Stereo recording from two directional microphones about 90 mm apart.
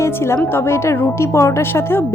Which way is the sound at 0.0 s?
30° left (ahead or behind).